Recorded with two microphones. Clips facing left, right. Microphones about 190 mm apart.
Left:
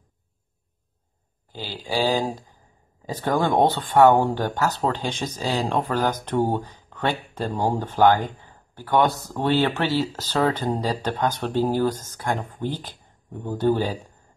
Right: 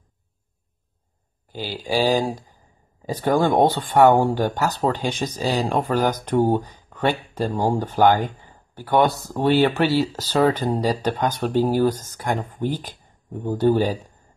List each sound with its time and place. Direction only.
1.5 s speech: 15° right (ahead or behind)